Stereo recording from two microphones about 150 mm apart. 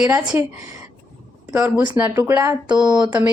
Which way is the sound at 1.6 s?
10° right (ahead or behind).